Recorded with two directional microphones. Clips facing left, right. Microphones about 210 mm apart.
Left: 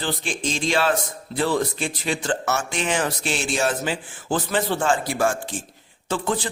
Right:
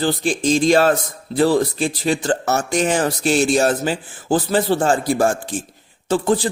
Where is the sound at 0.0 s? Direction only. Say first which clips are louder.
Right 8 dB; 40° right (ahead or behind).